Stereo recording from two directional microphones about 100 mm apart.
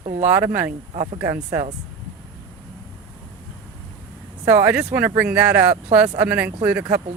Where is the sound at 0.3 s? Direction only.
20° right (ahead or behind).